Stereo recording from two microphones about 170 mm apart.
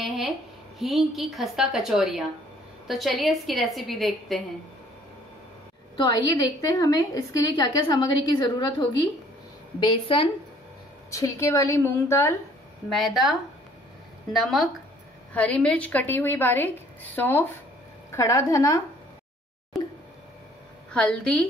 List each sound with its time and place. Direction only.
0.0 s a woman's voice: centre (ahead or behind)
5.9 s a woman's voice: 25° left (ahead or behind)
11.1 s a woman's voice: 20° left (ahead or behind)
12.9 s a woman's voice: centre (ahead or behind); by 18.8 s 20° left (ahead or behind)
19.7 s plop: centre (ahead or behind)
20.9 s a woman's voice: 5° left (ahead or behind)